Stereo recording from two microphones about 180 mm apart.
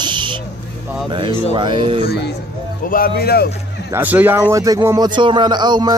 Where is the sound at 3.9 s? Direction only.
10° right (ahead or behind).